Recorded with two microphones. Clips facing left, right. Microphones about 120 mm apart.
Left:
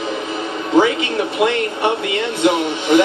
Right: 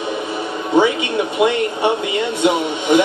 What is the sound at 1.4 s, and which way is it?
A man's voice, 15° right (ahead or behind).